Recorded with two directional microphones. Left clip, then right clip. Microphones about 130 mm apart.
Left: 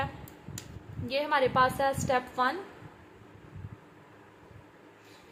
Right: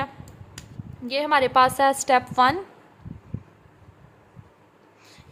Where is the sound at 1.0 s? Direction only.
55° right (ahead or behind); by 2.6 s 80° right.